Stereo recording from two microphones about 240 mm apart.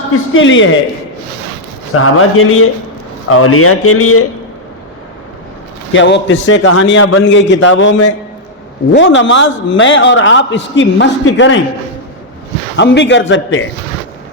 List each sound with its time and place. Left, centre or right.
0.3 s a man's voice: left
2.0 s speech: left
5.9 s a man's voice: left
12.7 s a man's voice: left